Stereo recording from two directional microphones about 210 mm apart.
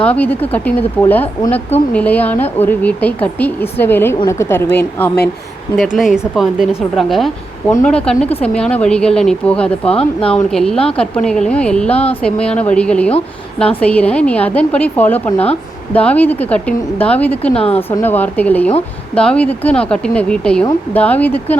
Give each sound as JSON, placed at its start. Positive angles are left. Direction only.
{"t": 0.0, "sound": "a woman's voice", "side_deg": 5}
{"t": 6.0, "sound": "a woman's voice", "side_deg": 0}
{"t": 17.5, "sound": "a woman's voice", "side_deg": 30}
{"t": 17.7, "sound": "a woman's voice", "side_deg": 10}